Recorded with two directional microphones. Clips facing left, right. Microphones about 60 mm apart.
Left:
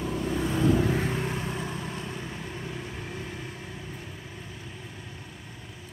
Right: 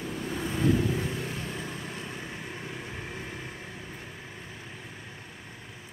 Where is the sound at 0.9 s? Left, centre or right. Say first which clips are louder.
Left 4 dB; left.